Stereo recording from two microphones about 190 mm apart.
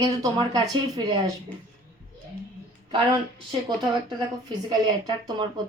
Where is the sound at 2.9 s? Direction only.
25° right (ahead or behind).